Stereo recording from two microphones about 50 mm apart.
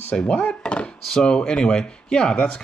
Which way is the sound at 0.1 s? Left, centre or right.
Left.